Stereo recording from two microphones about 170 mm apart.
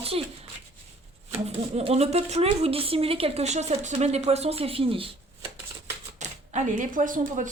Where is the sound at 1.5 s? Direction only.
35° right (ahead or behind).